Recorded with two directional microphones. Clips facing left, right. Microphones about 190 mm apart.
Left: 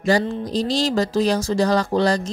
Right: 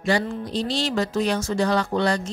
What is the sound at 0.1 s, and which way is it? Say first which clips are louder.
Speech: left 4 dB; 40° left (ahead or behind).